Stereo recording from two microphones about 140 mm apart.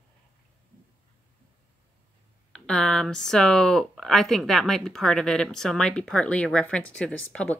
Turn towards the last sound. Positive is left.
turn(degrees=10)  # may be behind; listen again after turning